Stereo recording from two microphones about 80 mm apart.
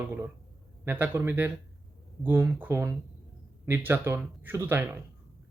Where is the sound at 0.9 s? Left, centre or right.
Right.